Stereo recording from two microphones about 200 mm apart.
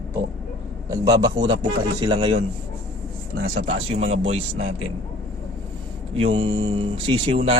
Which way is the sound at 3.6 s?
30° right (ahead or behind).